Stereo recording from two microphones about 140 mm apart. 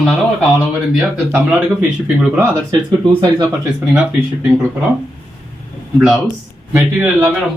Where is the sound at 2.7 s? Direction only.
25° right (ahead or behind).